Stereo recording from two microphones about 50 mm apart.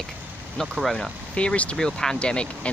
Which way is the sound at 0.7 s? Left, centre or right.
Centre.